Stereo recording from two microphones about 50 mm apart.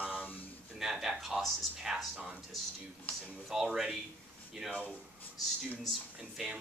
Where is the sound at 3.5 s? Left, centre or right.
Centre.